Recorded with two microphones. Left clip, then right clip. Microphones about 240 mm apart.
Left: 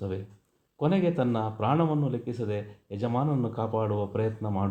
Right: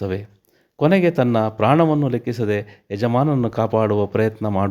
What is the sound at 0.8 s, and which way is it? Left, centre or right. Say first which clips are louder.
A man's voice: right 10 dB; right.